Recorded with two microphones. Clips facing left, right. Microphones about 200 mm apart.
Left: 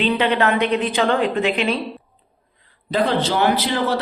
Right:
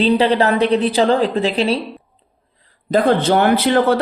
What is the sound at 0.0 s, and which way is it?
A woman's voice, 35° right (ahead or behind).